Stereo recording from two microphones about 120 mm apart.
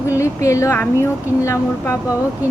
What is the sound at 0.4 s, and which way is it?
A woman's voice, 25° left (ahead or behind).